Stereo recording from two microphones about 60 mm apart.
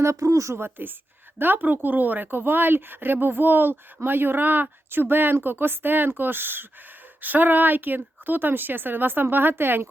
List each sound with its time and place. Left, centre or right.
0.0 s a woman's voice: right
0.5 s speech: right